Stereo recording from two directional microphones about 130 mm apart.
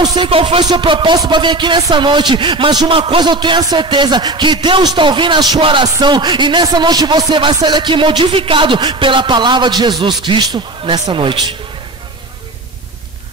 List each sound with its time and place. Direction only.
0.0 s music: 30° right (ahead or behind)
0.3 s speech: 45° right (ahead or behind)